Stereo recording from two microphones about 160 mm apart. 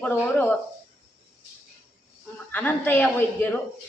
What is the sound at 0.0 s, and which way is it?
Speech, 10° left (ahead or behind).